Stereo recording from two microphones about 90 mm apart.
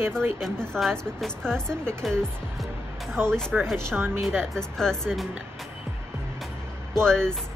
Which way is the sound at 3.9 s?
25° right (ahead or behind).